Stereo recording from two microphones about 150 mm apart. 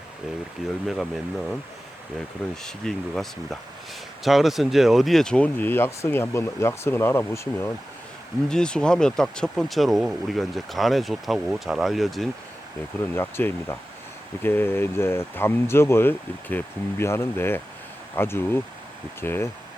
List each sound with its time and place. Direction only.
0.6 s speech: centre (ahead or behind)
2.6 s speech: 5° left (ahead or behind)
8.4 s speech: 5° left (ahead or behind)
13.1 s speech: 15° left (ahead or behind)